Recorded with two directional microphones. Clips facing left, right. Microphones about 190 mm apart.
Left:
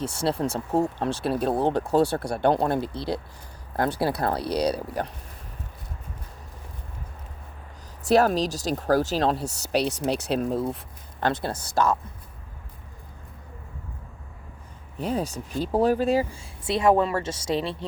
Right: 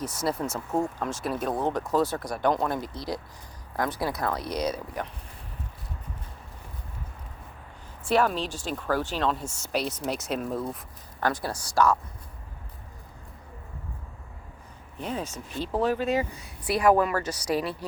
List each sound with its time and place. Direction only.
0.0 s speech: 30° left (ahead or behind)
8.0 s speech: 40° left (ahead or behind); by 11.9 s 20° left (ahead or behind)
15.0 s speech: 35° left (ahead or behind)